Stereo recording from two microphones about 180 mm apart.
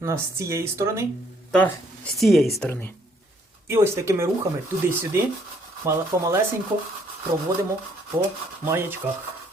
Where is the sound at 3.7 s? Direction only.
15° right (ahead or behind).